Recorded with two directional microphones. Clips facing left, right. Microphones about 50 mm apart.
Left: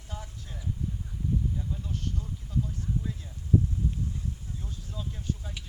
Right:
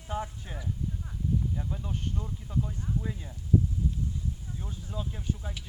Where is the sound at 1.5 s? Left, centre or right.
Right.